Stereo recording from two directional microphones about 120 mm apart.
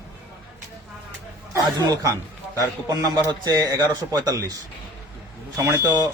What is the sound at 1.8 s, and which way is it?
Speech, 30° right (ahead or behind).